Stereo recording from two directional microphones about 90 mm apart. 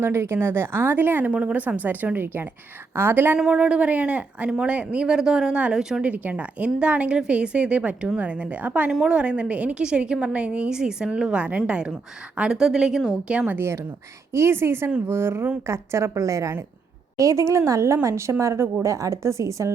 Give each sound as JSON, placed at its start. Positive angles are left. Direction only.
{"t": 0.0, "sound": "speech", "side_deg": -30}
{"t": 3.3, "sound": "speech", "side_deg": -10}
{"t": 13.5, "sound": "speech", "side_deg": -30}